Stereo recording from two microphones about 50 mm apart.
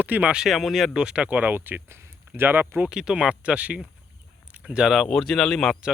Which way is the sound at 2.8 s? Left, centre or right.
Centre.